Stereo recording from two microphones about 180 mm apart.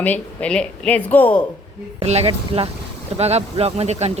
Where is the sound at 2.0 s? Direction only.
35° right (ahead or behind).